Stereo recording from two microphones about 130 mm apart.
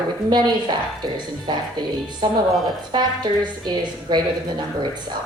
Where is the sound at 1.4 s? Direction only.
35° right (ahead or behind).